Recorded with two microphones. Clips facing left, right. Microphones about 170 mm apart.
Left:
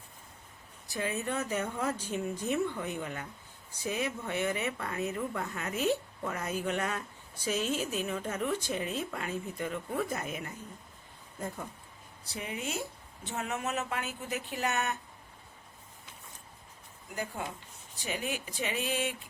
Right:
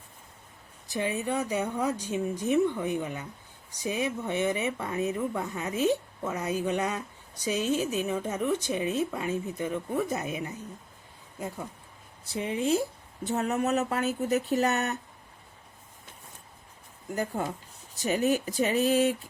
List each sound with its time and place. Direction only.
0.9 s speech: 20° right (ahead or behind)
12.3 s speech: 25° right (ahead or behind)
17.1 s speech: 40° right (ahead or behind)